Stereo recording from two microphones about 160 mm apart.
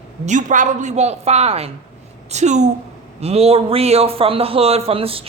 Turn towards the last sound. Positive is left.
turn(degrees=-35)  # may be behind; listen again after turning